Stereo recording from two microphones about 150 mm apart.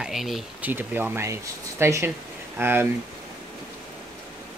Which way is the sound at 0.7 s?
10° right (ahead or behind).